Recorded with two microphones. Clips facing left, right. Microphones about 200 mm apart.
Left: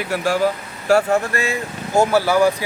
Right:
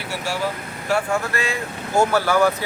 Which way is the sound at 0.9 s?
40° left (ahead or behind).